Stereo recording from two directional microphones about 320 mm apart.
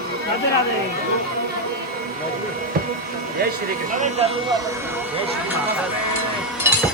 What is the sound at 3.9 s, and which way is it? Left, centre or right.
Speech, right.